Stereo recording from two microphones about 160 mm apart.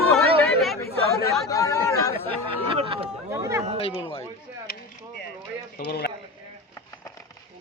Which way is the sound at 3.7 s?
35° left (ahead or behind).